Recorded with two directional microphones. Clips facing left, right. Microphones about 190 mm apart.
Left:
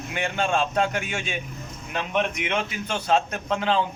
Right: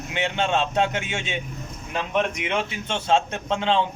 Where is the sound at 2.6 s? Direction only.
25° right (ahead or behind).